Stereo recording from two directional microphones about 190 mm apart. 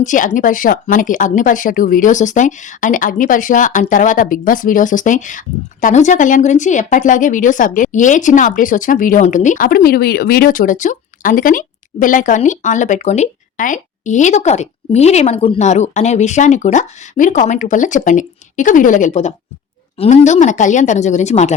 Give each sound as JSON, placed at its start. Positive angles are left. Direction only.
{"t": 0.0, "sound": "speech", "side_deg": 40}